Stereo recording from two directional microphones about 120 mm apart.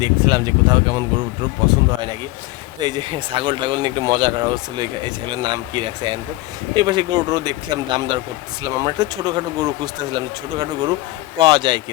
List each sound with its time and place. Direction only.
0.0 s speech: 35° right (ahead or behind)